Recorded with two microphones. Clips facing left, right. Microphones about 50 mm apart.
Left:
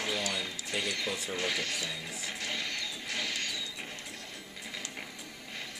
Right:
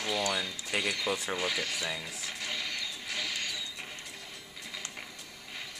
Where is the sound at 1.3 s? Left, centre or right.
Centre.